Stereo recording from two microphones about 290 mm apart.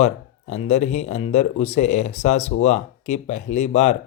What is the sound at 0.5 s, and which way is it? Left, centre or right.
Speech, left.